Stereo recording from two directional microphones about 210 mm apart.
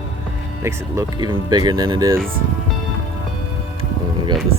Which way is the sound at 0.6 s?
15° right (ahead or behind).